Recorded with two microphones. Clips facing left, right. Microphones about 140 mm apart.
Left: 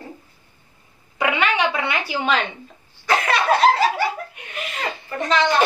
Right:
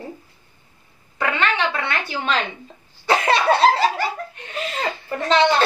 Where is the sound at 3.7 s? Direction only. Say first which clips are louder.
Left 1 dB; 5° left (ahead or behind).